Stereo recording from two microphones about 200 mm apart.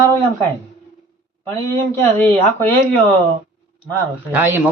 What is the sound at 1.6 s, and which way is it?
Speech, 10° left (ahead or behind).